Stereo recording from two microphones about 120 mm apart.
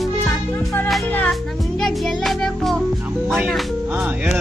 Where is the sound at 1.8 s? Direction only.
5° left (ahead or behind).